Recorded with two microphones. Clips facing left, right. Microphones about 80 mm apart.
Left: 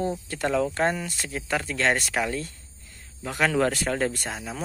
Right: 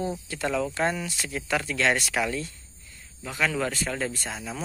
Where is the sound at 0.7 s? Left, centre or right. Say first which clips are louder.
Left 2 dB; left.